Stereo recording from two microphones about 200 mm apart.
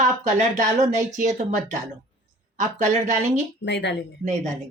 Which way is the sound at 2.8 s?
35° right (ahead or behind).